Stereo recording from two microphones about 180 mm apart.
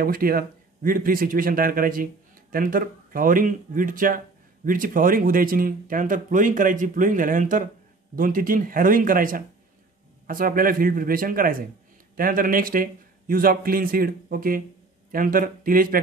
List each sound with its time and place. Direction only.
0.0 s speech: 55° right (ahead or behind)